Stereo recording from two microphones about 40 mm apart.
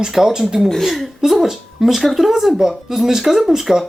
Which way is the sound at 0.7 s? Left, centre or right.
Centre.